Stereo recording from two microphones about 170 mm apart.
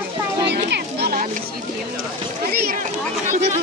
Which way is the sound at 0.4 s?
75° right (ahead or behind).